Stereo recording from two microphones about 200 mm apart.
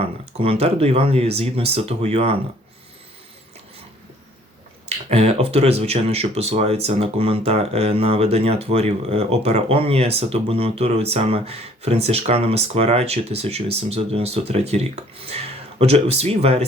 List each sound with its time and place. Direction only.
0.0 s speech: 30° right (ahead or behind)
4.9 s speech: 30° right (ahead or behind)